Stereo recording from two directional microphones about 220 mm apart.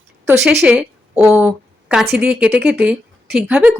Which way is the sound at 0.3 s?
5° right (ahead or behind).